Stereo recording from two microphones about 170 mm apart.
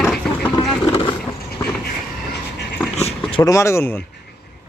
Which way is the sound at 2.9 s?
40° left (ahead or behind).